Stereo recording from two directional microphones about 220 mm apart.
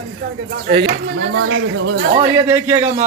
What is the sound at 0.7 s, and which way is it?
Speech, 55° right (ahead or behind).